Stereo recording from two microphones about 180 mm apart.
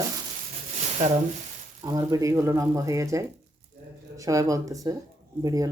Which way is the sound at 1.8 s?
20° right (ahead or behind).